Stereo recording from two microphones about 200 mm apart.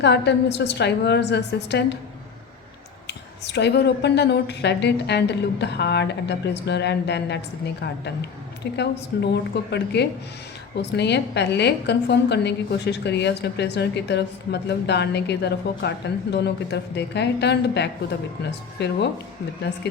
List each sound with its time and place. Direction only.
0.0 s a woman's voice: 60° left (ahead or behind)
3.1 s a woman's voice: 60° left (ahead or behind)
8.7 s a woman's voice: 60° left (ahead or behind)